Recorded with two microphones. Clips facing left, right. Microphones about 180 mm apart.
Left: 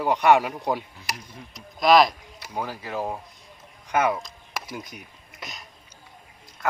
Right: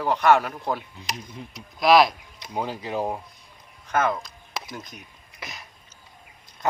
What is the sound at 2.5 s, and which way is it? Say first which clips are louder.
Speech: right 2 dB; 20° right (ahead or behind).